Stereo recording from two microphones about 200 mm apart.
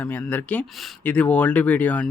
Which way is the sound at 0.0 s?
10° left (ahead or behind).